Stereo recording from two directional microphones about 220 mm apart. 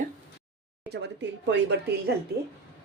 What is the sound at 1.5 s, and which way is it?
Speech, 50° right (ahead or behind).